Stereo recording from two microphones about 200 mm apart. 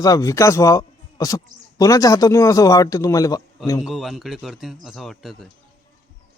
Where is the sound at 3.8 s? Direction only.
Centre (ahead or behind).